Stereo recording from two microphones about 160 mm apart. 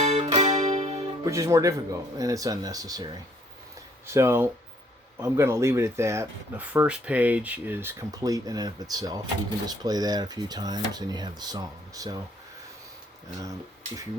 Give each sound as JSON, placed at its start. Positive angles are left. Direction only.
{"t": 0.0, "sound": "music", "side_deg": -40}
{"t": 0.9, "sound": "speech", "side_deg": -25}
{"t": 13.4, "sound": "speech", "side_deg": -20}